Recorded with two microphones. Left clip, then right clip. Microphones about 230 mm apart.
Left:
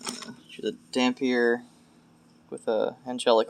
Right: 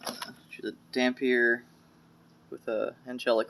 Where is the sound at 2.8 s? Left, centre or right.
Centre.